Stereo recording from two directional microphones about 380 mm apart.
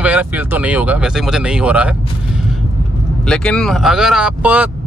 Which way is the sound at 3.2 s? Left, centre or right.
Centre.